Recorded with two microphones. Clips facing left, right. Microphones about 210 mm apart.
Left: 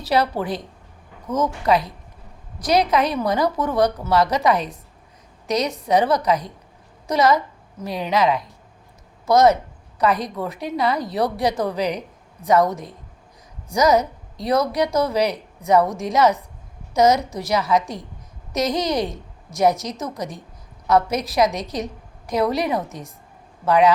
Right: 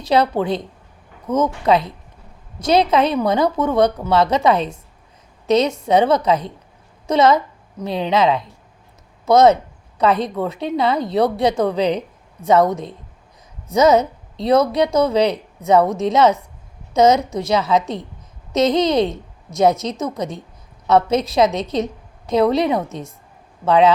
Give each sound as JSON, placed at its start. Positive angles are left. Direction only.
{"t": 0.1, "sound": "a woman's voice", "side_deg": -20}
{"t": 20.1, "sound": "a woman's voice", "side_deg": -25}